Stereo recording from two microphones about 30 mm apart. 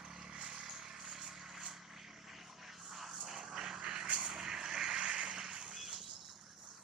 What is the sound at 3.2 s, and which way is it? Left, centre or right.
Vehicle, centre.